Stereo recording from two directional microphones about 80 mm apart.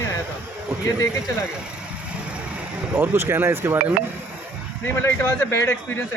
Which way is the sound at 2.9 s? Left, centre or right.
Right.